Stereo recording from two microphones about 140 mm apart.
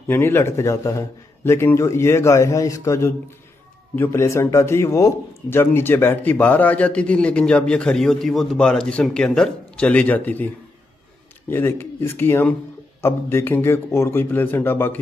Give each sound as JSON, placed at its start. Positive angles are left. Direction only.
{"t": 0.1, "sound": "a man's voice", "side_deg": 15}